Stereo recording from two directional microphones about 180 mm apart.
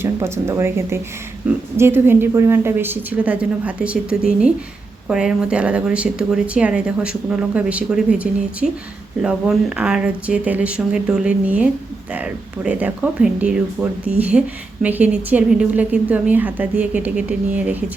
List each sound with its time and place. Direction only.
0.0 s a woman's voice: 15° right (ahead or behind)